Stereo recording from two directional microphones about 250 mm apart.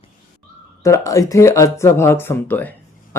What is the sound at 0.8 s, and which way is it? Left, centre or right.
Speech, centre.